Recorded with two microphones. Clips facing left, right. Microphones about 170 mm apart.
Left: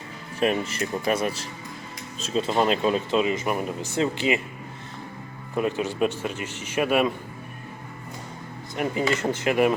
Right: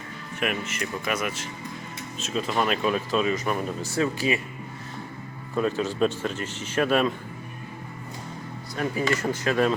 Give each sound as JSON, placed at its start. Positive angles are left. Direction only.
{"t": 0.3, "sound": "speech", "side_deg": 35}
{"t": 5.5, "sound": "speech", "side_deg": 15}
{"t": 8.7, "sound": "speech", "side_deg": 20}